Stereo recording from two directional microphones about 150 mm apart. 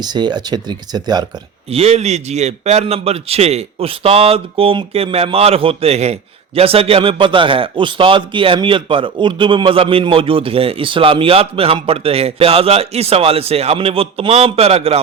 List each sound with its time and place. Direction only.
0.0 s speech: 30° right (ahead or behind)
1.7 s a man's voice: 45° right (ahead or behind)